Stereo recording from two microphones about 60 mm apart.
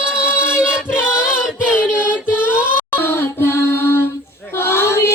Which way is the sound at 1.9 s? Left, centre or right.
Left.